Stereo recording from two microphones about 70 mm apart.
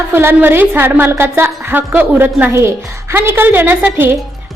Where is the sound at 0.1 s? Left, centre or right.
Right.